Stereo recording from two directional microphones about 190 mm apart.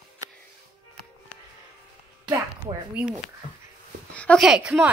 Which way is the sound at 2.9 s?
5° right (ahead or behind).